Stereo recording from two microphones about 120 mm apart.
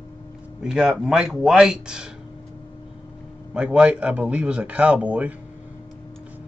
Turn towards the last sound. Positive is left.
turn(degrees=-10)  # may be behind; listen again after turning